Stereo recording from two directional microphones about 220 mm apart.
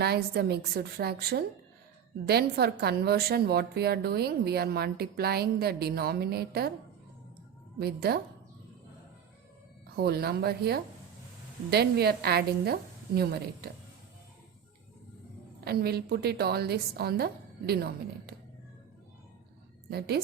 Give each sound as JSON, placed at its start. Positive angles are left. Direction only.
{"t": 0.0, "sound": "a woman's voice", "side_deg": -45}
{"t": 7.8, "sound": "a woman's voice", "side_deg": -45}
{"t": 9.9, "sound": "a woman's voice", "side_deg": -45}
{"t": 15.6, "sound": "a woman's voice", "side_deg": -45}
{"t": 19.9, "sound": "a woman's voice", "side_deg": -45}